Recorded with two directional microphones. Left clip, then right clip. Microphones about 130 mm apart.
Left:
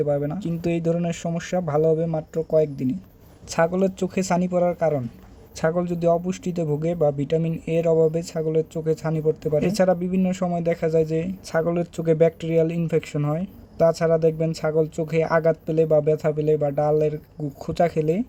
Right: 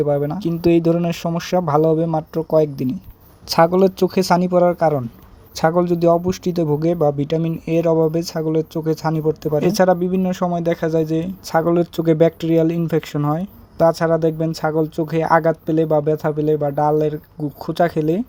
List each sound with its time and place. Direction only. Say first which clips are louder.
0.0 s speech: right 5 dB; 30° right (ahead or behind)